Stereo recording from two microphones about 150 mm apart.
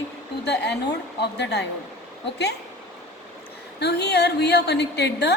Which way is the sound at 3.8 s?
90° left.